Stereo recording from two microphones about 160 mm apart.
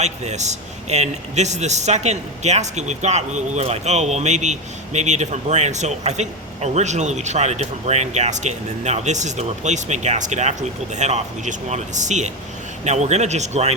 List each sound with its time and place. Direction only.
0.0 s speech: 45° right (ahead or behind)